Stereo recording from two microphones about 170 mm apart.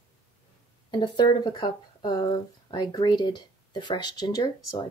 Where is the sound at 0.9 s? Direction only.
25° left (ahead or behind).